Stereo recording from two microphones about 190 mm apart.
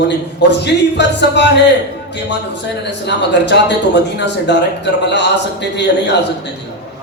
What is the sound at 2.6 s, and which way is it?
A man's voice, 65° left (ahead or behind).